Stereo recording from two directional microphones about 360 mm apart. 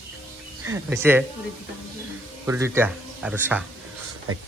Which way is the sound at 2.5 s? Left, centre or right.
Centre.